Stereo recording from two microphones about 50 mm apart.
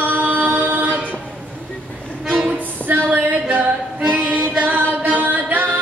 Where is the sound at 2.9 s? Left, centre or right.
Right.